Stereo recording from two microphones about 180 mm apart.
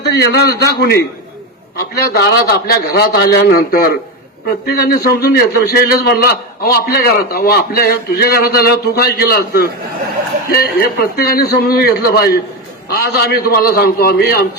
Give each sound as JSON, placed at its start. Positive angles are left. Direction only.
{"t": 0.0, "sound": "a man's voice", "side_deg": 65}